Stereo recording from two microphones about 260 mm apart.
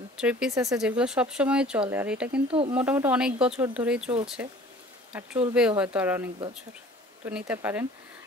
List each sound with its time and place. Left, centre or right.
0.2 s speech: centre
2.4 s speech: right
2.7 s speech: centre
7.2 s speech: centre